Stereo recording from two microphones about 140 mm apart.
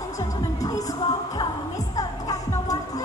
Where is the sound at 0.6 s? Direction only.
25° left (ahead or behind).